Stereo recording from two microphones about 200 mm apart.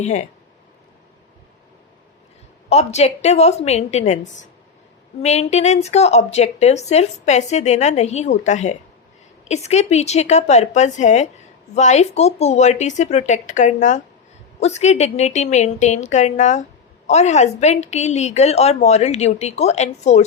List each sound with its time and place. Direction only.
0.0 s a woman's voice: 35° left (ahead or behind)
2.6 s a woman's voice: 35° left (ahead or behind)